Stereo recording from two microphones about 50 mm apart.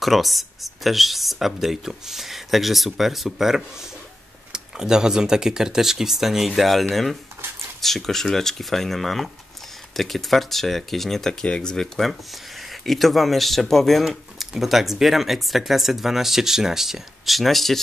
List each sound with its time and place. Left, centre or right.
0.0 s speech: centre
11.4 s speech: centre
12.0 s speech: centre